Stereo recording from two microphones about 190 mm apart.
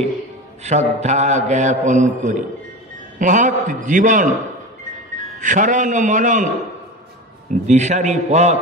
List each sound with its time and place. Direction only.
0.7 s mantra: 35° right (ahead or behind)
3.2 s a man's voice: 40° right (ahead or behind)
7.6 s mantra: 35° right (ahead or behind)